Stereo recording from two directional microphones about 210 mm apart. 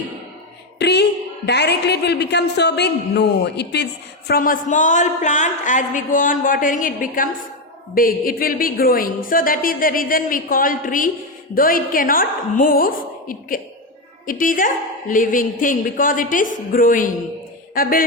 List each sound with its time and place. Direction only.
0.8 s a woman's voice: 55° left (ahead or behind)